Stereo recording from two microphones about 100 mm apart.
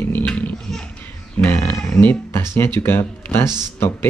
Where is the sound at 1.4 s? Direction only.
20° left (ahead or behind).